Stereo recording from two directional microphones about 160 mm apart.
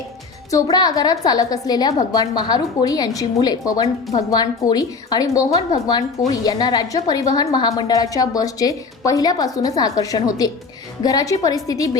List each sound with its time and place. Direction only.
0.5 s a woman's voice: 25° left (ahead or behind)